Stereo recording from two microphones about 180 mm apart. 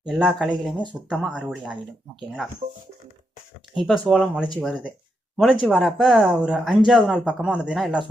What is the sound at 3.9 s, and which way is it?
Speech, centre (ahead or behind).